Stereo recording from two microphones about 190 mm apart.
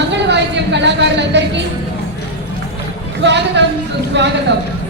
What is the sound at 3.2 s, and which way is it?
Speech, 65° right (ahead or behind).